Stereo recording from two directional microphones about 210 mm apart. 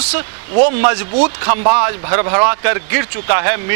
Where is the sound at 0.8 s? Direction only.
15° right (ahead or behind).